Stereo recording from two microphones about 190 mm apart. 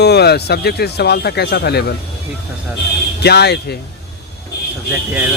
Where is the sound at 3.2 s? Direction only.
60° left (ahead or behind).